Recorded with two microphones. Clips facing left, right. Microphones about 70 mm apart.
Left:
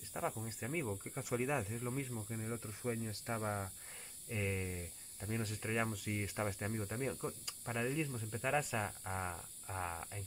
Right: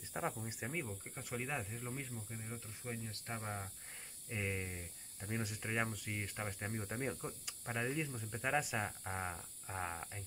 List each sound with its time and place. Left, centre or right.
0.2 s speech: centre
1.1 s speech: centre
2.3 s speech: centre
4.3 s speech: centre
6.7 s speech: centre
7.2 s speech: centre
7.6 s speech: centre